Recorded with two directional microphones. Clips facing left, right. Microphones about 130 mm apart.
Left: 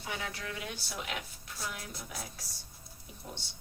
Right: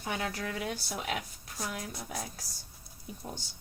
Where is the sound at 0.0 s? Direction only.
45° right (ahead or behind).